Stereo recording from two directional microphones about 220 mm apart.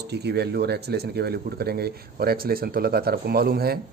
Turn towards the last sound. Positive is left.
turn(degrees=-45)  # may be behind; listen again after turning